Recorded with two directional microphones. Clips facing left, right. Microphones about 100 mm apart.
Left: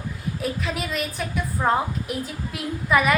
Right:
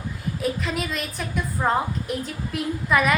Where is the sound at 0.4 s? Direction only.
Centre (ahead or behind).